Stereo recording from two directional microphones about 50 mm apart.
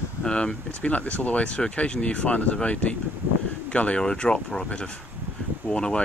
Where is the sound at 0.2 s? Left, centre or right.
Left.